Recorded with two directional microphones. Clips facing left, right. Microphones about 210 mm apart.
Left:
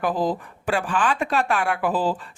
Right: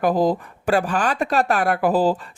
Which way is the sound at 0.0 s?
40° right (ahead or behind).